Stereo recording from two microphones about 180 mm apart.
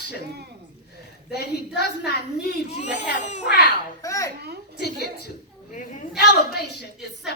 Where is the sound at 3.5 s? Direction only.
70° left (ahead or behind).